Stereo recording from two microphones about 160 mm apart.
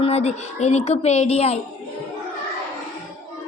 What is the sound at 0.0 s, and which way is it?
A woman's voice, 40° left (ahead or behind).